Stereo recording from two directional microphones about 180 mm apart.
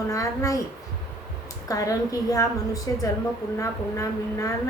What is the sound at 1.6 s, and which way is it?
A woman's voice, 20° left (ahead or behind).